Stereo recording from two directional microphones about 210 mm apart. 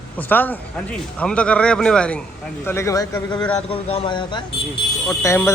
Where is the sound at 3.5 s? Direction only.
25° left (ahead or behind).